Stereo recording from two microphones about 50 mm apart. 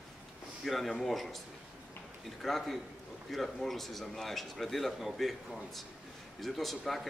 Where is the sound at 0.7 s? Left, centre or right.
Centre.